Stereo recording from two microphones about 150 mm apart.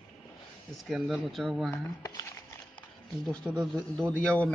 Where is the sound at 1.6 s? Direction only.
20° left (ahead or behind).